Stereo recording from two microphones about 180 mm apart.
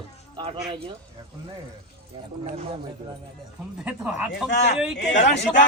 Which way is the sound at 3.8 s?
5° right (ahead or behind).